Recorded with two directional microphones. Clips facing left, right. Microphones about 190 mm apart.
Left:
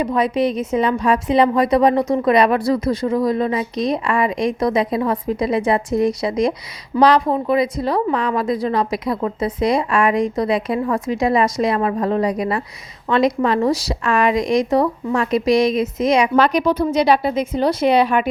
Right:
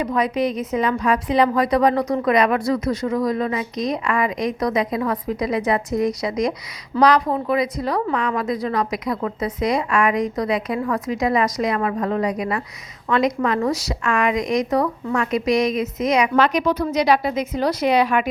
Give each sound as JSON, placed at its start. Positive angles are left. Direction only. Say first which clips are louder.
{"t": 0.0, "sound": "a woman's voice", "louder": "left 3 dB", "side_deg": 30}